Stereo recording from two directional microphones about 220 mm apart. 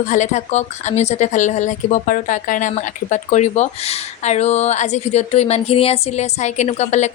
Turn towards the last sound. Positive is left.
turn(degrees=30)  # may be behind; listen again after turning